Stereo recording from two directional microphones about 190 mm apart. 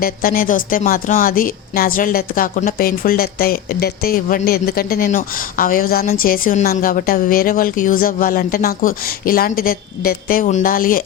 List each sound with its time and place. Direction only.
0.0 s a woman's voice: 50° left (ahead or behind)